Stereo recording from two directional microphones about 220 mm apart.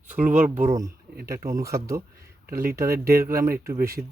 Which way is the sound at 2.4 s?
45° right (ahead or behind).